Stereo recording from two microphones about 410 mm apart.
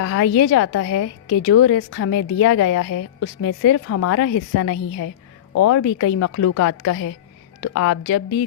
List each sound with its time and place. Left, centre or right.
0.0 s a woman's voice: left